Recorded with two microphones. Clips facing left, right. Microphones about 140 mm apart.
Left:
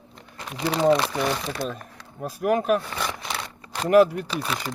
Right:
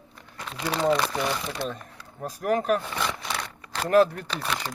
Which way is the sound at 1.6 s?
45° left (ahead or behind).